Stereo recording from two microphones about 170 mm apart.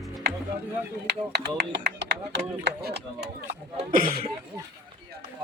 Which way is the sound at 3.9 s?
55° right (ahead or behind).